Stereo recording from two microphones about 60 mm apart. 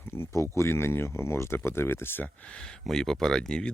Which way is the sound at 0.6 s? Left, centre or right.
Left.